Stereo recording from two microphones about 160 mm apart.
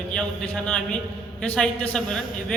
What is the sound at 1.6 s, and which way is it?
Speech, 5° left (ahead or behind).